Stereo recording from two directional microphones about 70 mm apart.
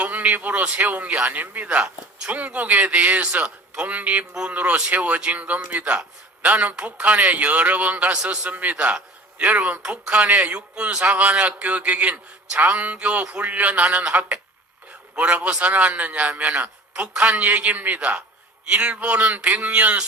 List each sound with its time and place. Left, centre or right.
0.0 s speech: right